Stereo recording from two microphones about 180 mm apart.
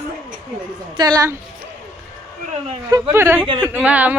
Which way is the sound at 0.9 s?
20° right (ahead or behind).